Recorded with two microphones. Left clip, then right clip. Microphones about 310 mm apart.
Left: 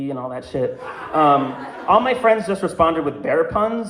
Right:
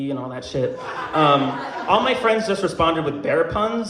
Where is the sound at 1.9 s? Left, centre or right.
Left.